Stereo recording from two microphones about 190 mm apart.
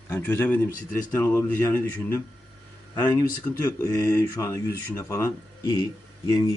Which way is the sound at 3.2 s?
15° left (ahead or behind).